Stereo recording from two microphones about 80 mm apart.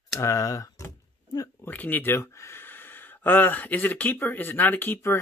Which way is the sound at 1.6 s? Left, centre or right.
Left.